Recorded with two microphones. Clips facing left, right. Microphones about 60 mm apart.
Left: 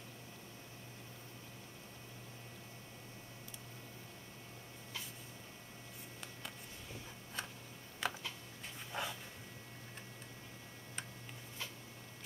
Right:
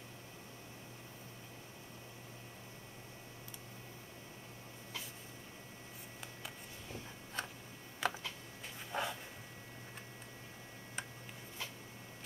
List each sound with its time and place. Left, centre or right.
6.2 s a sound: centre
8.0 s computer keyboard: centre
8.9 s dog: centre